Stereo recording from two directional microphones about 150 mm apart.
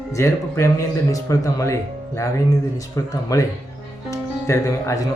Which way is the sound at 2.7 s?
25° left (ahead or behind).